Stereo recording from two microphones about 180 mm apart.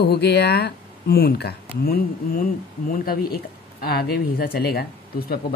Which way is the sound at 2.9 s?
55° left (ahead or behind).